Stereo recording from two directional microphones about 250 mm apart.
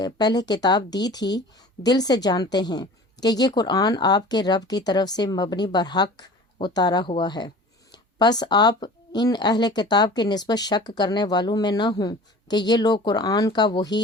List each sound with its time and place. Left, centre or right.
0.0 s a woman's voice: centre